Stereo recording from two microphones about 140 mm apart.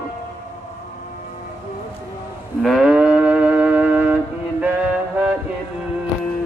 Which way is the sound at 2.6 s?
5° right (ahead or behind).